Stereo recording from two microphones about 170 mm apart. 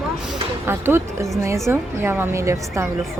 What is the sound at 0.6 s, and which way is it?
Speech, 15° right (ahead or behind).